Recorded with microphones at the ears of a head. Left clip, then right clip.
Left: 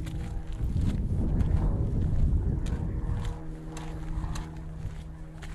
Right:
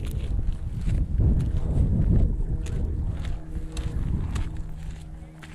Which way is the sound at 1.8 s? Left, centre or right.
Right.